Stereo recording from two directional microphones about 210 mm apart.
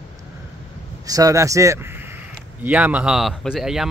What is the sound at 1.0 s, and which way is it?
A man's voice, 15° right (ahead or behind).